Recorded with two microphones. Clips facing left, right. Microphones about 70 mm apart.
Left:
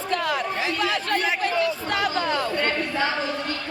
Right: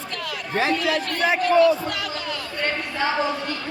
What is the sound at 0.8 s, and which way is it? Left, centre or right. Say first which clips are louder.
Speech: right 1 dB; left.